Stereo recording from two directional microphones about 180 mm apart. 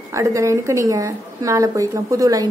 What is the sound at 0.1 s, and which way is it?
A woman's voice, 15° right (ahead or behind).